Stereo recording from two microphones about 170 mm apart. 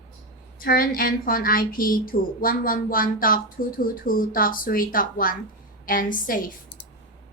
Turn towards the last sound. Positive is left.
turn(degrees=55)  # may be behind; listen again after turning